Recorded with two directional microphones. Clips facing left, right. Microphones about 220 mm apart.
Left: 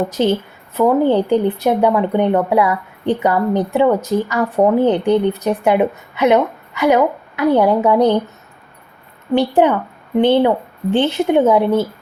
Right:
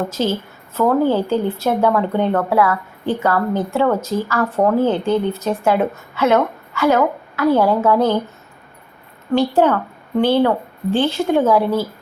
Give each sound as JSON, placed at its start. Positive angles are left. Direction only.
{"t": 0.0, "sound": "speech", "side_deg": 15}
{"t": 9.6, "sound": "a woman's voice", "side_deg": 15}